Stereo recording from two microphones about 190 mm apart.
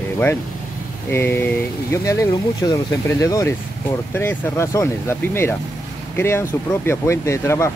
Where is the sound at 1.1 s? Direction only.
10° left (ahead or behind).